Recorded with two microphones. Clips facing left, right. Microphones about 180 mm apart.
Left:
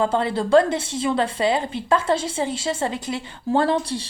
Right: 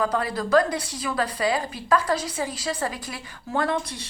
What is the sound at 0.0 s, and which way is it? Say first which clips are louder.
A woman's voice: left 4 dB; 25° left (ahead or behind).